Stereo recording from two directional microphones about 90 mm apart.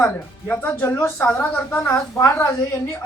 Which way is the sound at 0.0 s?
25° left (ahead or behind).